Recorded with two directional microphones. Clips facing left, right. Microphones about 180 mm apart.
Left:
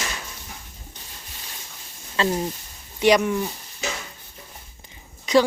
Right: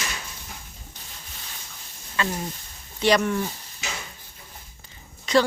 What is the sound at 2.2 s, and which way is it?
Speech, 30° left (ahead or behind).